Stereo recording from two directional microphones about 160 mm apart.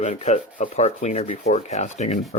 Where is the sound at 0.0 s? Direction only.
45° left (ahead or behind).